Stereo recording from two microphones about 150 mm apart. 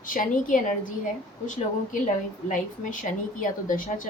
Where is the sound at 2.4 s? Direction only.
60° left (ahead or behind).